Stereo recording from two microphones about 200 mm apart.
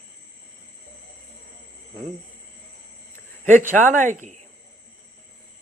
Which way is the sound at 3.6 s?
40° right (ahead or behind).